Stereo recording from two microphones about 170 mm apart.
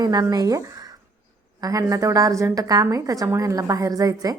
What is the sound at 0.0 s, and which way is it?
A woman's voice, 25° right (ahead or behind).